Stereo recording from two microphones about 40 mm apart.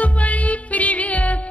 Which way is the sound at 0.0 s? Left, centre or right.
Left.